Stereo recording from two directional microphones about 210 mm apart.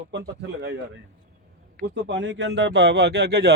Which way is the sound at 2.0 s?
55° right (ahead or behind).